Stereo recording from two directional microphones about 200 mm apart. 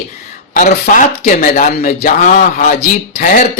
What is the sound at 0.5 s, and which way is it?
A man's voice, 40° left (ahead or behind).